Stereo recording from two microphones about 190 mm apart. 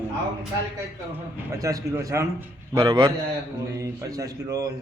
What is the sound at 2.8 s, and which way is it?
Speech, 25° right (ahead or behind).